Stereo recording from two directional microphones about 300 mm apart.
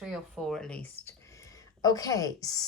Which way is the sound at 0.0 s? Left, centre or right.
Centre.